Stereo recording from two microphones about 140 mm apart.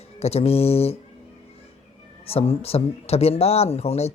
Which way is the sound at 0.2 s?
50° left (ahead or behind).